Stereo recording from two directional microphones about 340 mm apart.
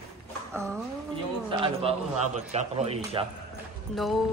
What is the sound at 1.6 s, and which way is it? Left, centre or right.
A man's voice, centre.